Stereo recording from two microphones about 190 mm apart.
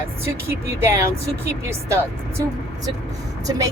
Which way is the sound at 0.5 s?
15° right (ahead or behind).